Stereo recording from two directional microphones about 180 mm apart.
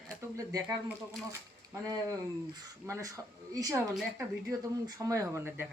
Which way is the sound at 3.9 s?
Centre (ahead or behind).